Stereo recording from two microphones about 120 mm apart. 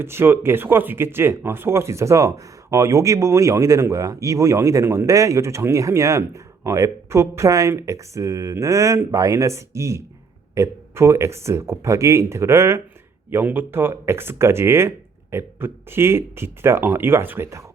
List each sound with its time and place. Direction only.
0.0 s speech: 20° right (ahead or behind)